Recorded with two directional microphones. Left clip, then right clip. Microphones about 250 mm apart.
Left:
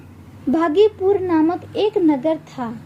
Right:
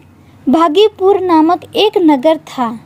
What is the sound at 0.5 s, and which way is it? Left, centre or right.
A woman's voice, right.